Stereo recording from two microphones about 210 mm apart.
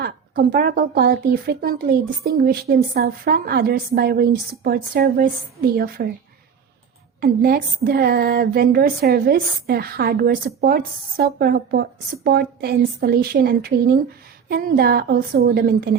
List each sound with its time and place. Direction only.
0.0 s a woman's voice: 45° right (ahead or behind)
7.2 s a woman's voice: 45° right (ahead or behind)